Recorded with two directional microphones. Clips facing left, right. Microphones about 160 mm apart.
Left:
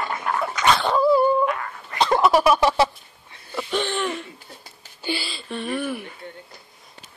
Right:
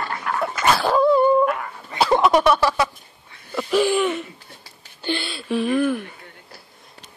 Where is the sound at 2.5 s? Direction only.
25° left (ahead or behind).